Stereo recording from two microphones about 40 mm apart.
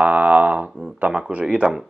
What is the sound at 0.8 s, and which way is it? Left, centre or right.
Speech, right.